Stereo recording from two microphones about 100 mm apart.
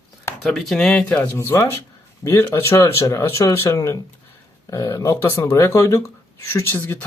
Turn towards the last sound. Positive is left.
turn(degrees=25)  # may be behind; listen again after turning